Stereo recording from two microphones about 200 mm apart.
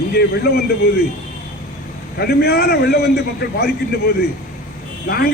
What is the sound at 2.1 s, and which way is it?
A man's voice, 50° left (ahead or behind).